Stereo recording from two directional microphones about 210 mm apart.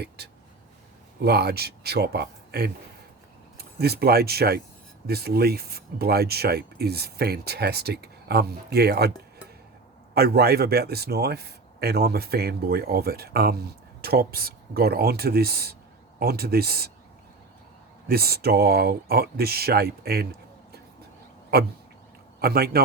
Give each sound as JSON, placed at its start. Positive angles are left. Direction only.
{"t": 0.2, "sound": "a sound", "side_deg": -50}
{"t": 1.2, "sound": "speech", "side_deg": -50}
{"t": 10.2, "sound": "speech", "side_deg": -45}
{"t": 18.1, "sound": "speech", "side_deg": -50}
{"t": 21.5, "sound": "a man's voice", "side_deg": -50}